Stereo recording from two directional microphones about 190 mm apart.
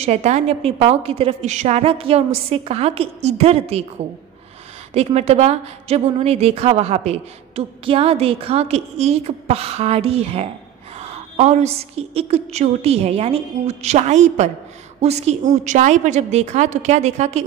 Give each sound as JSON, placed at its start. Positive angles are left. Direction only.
{"t": 0.0, "sound": "a woman's voice", "side_deg": -35}
{"t": 4.9, "sound": "a woman's voice", "side_deg": -35}